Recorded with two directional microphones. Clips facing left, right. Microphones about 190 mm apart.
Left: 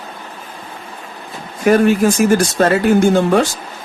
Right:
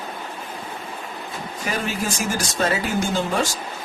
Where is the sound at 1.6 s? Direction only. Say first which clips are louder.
Left 15 dB; 55° left (ahead or behind).